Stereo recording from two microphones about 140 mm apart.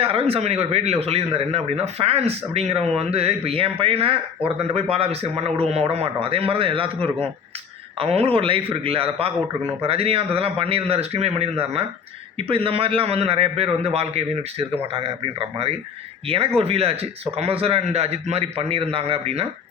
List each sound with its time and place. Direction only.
0.0 s a man's voice: 45° right (ahead or behind)